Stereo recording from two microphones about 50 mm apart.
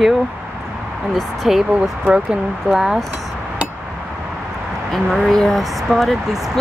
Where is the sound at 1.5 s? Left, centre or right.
Centre.